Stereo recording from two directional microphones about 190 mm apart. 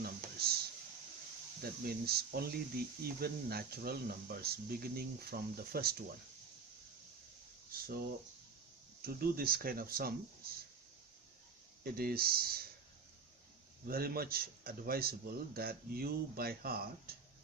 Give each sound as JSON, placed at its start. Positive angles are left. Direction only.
{"t": 0.0, "sound": "a sound", "side_deg": -55}
{"t": 1.6, "sound": "speech", "side_deg": -55}
{"t": 7.7, "sound": "a sound", "side_deg": -50}
{"t": 9.0, "sound": "speech", "side_deg": -50}
{"t": 11.8, "sound": "speech", "side_deg": -50}
{"t": 13.8, "sound": "speech", "side_deg": -50}